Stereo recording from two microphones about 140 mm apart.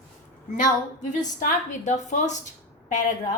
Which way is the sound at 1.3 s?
60° left (ahead or behind).